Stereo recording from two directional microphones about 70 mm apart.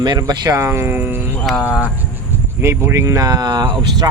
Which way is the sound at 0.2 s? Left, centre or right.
Right.